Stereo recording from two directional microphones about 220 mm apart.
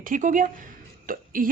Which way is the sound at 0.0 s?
35° right (ahead or behind).